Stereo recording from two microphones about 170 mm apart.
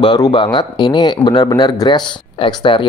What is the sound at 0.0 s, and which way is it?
Speech, 25° left (ahead or behind).